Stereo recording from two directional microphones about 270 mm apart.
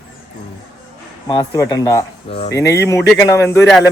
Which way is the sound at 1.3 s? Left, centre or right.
Centre.